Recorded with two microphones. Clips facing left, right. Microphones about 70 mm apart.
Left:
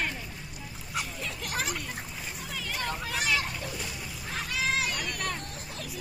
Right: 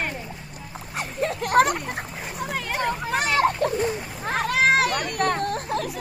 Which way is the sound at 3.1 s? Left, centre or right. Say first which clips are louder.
Right 10 dB; right.